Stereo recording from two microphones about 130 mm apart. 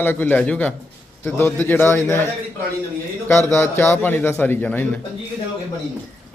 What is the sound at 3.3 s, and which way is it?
Speech, 20° left (ahead or behind).